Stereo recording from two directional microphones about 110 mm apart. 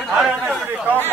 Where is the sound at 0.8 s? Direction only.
20° right (ahead or behind).